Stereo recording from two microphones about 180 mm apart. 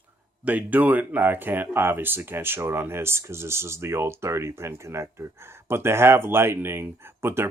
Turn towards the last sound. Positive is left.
turn(degrees=-15)  # may be behind; listen again after turning